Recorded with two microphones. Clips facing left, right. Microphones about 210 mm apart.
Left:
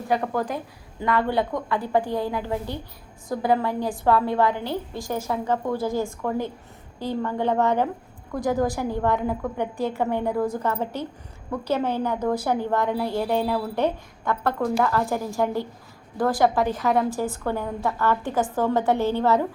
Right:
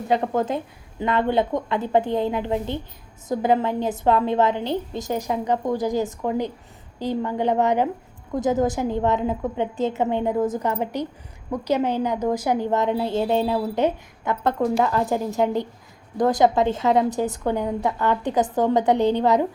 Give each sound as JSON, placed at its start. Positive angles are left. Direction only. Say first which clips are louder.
{"t": 0.1, "sound": "a woman's voice", "louder": "right 3 dB", "side_deg": -25}